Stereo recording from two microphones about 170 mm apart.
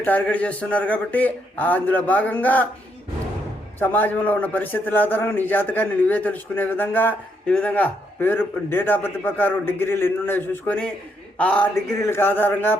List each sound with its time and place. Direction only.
0.0 s a man's voice: 10° left (ahead or behind)
3.8 s a man's voice: 10° left (ahead or behind)